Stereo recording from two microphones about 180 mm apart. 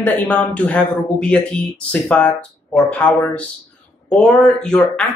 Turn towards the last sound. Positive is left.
turn(degrees=5)  # may be behind; listen again after turning